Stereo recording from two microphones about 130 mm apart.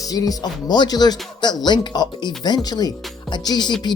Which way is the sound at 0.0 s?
25° left (ahead or behind).